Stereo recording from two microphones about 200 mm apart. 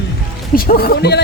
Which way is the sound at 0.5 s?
50° left (ahead or behind).